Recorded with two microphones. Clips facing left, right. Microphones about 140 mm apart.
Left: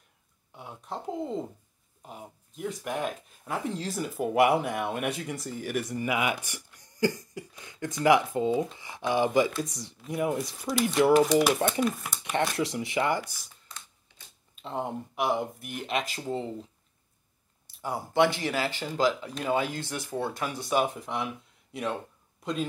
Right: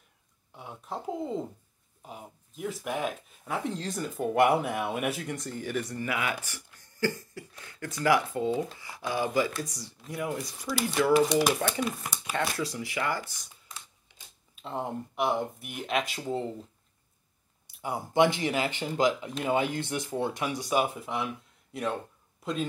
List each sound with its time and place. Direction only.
0.5 s speech: centre (ahead or behind); by 11.2 s 30° left (ahead or behind)
11.2 s speech: centre (ahead or behind)
12.3 s speech: 25° left (ahead or behind)
14.5 s speech: centre (ahead or behind)
17.8 s speech: 20° right (ahead or behind); by 22.7 s centre (ahead or behind)